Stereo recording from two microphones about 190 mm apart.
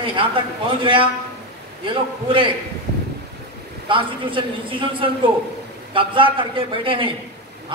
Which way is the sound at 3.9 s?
25° right (ahead or behind).